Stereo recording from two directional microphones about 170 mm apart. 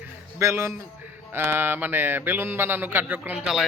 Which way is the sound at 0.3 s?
15° right (ahead or behind).